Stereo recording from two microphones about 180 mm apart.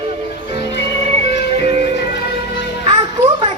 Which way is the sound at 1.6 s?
35° right (ahead or behind).